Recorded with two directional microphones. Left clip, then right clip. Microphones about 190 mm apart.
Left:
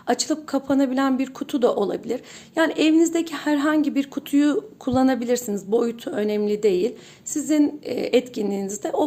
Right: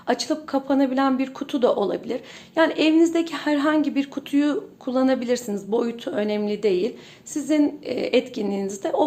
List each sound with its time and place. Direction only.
0.1 s speech: 30° left (ahead or behind)